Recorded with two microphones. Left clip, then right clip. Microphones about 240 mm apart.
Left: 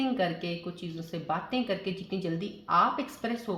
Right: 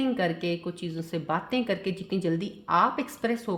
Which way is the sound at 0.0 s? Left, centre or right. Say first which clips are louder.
Right 2 dB; right.